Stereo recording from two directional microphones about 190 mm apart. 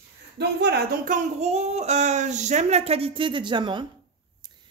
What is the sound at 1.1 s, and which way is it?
Speech, 35° right (ahead or behind).